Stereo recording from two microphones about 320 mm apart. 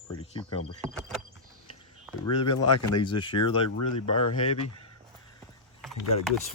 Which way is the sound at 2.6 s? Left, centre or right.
Left.